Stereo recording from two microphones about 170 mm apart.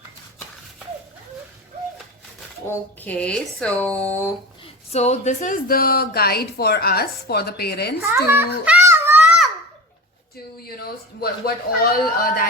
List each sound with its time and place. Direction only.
2.6 s speech: 10° left (ahead or behind)
4.9 s speech: 40° left (ahead or behind); by 7.9 s 70° left (ahead or behind)
8.0 s a child's voice: 15° right (ahead or behind)
10.6 s speech: 65° left (ahead or behind)